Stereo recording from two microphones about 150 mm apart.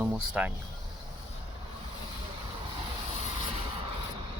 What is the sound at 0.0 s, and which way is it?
Speech, 10° right (ahead or behind).